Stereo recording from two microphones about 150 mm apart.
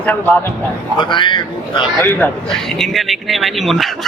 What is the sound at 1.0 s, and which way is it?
Speech, 30° left (ahead or behind).